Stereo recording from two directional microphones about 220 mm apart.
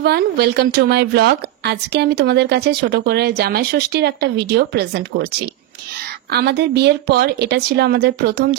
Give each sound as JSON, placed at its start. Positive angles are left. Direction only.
{"t": 0.0, "sound": "a woman's voice", "side_deg": -45}
{"t": 6.3, "sound": "a woman's voice", "side_deg": -50}